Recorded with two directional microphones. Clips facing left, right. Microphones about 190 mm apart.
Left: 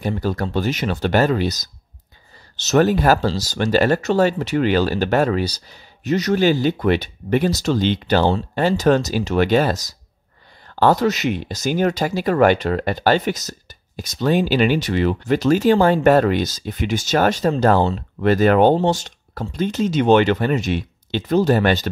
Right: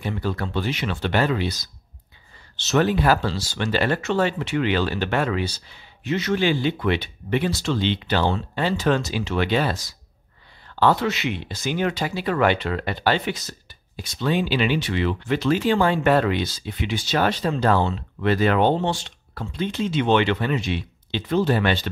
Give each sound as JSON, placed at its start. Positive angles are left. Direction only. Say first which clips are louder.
{"t": 0.0, "sound": "speech", "louder": "left 4 dB", "side_deg": 40}